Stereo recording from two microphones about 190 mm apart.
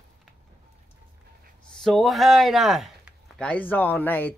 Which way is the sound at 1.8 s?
Centre (ahead or behind).